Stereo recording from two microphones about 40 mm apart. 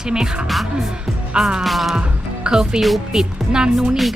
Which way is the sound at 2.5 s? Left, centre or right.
Centre.